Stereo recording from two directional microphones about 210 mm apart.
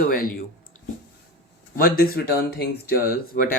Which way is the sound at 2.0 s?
50° left (ahead or behind).